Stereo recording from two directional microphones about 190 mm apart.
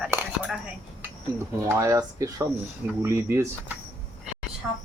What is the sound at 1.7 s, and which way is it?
Speech, 15° right (ahead or behind).